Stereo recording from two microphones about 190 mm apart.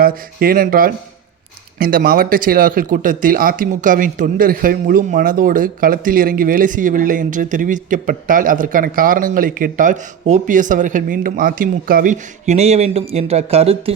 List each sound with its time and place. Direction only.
0.0 s speech: 50° right (ahead or behind); by 13.9 s 30° right (ahead or behind)